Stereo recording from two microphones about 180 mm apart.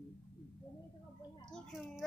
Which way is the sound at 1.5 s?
Centre (ahead or behind).